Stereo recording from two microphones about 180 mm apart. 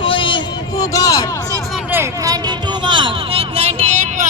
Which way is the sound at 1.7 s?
5° right (ahead or behind).